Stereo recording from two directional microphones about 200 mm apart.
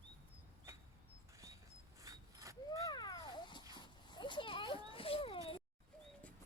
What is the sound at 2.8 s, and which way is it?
Dog, 20° left (ahead or behind).